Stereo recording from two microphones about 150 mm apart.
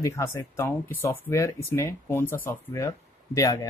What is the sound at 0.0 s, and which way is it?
Speech, 20° left (ahead or behind).